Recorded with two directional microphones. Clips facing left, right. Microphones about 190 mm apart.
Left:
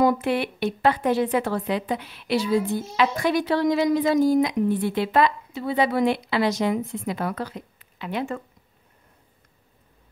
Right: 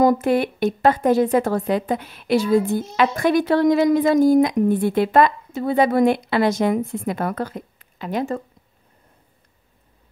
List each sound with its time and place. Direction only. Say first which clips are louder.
0.0 s a woman's voice: right 4 dB; 45° right (ahead or behind)